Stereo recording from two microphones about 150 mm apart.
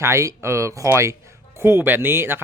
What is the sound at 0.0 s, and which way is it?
Speech, 20° right (ahead or behind).